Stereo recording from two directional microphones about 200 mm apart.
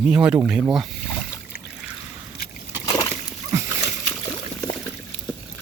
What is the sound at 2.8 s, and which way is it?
Splash, 15° left (ahead or behind).